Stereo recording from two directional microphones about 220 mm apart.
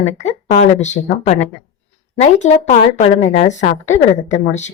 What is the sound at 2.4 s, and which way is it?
A woman's voice, 30° left (ahead or behind).